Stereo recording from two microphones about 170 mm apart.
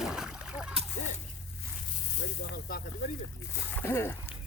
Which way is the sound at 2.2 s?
60° left (ahead or behind).